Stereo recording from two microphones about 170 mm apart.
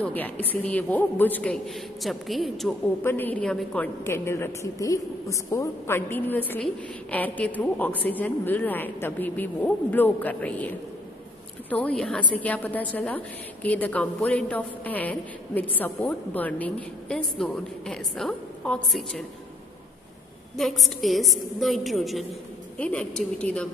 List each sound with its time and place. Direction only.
0.0 s a woman's voice: 10° left (ahead or behind)
3.0 s a woman's voice: 10° left (ahead or behind)
11.7 s a woman's voice: 5° left (ahead or behind)
20.5 s a woman's voice: centre (ahead or behind)